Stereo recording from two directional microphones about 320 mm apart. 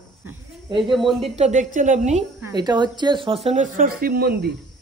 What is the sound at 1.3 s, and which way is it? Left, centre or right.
Speech, right.